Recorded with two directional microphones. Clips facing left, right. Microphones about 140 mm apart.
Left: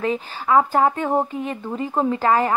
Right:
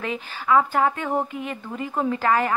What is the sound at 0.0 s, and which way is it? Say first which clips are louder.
Speech: left 5 dB; 35° left (ahead or behind).